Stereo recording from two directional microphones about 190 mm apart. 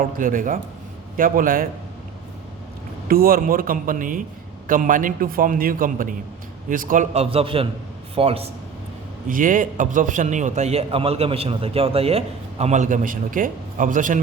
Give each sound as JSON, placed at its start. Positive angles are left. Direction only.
{"t": 0.2, "sound": "a man's voice", "side_deg": -45}
{"t": 3.1, "sound": "a man's voice", "side_deg": -50}
{"t": 9.3, "sound": "a man's voice", "side_deg": -45}